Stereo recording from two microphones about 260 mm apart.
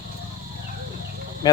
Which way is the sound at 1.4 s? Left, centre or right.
Centre.